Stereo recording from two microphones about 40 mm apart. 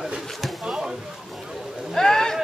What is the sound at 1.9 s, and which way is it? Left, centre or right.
Boat, centre.